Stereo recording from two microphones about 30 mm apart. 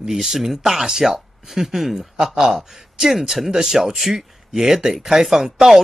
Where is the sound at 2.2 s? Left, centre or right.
Right.